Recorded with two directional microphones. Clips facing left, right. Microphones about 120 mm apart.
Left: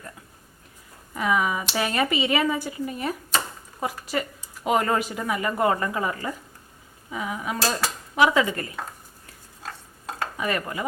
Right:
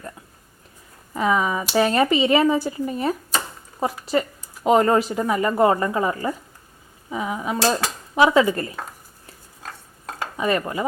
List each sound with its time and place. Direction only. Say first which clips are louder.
1.1 s a woman's voice: right 3 dB; 30° right (ahead or behind)
10.3 s a woman's voice: right 7 dB; 25° right (ahead or behind)